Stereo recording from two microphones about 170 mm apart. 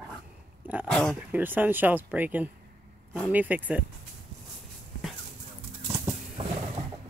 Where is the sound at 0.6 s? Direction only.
10° right (ahead or behind).